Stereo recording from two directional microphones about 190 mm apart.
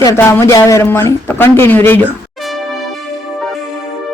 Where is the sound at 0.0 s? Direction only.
15° left (ahead or behind).